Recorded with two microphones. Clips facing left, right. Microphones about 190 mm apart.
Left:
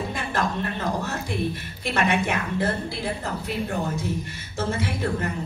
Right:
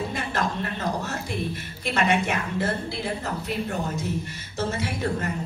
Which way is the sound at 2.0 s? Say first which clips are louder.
Even; 55° left (ahead or behind).